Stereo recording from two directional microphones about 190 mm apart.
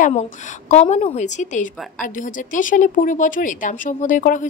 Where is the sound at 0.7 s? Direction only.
35° left (ahead or behind).